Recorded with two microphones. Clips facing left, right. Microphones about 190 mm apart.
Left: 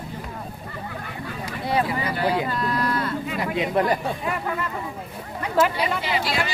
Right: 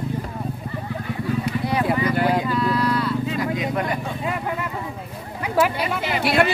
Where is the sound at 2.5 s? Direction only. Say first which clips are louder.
Right 4 dB; 45° left (ahead or behind).